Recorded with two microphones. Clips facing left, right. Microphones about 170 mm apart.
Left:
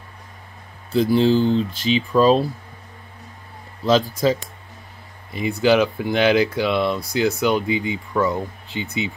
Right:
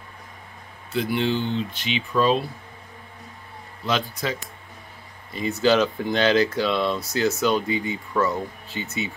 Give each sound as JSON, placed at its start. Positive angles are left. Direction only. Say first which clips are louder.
{"t": 0.9, "sound": "speech", "louder": "left 7 dB", "side_deg": 35}
{"t": 4.2, "sound": "speech", "louder": "left 9 dB", "side_deg": 35}
{"t": 5.3, "sound": "speech", "louder": "left 3 dB", "side_deg": 15}